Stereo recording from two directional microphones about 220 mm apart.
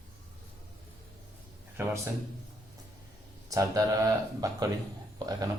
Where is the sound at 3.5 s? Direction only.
15° right (ahead or behind).